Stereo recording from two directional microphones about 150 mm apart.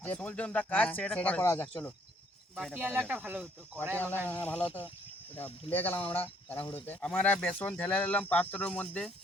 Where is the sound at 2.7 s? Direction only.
10° right (ahead or behind).